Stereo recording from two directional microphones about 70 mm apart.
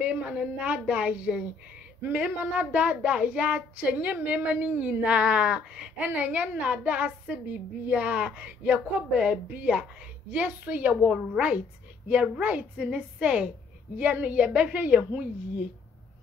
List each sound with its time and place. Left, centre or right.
0.0 s a woman's voice: centre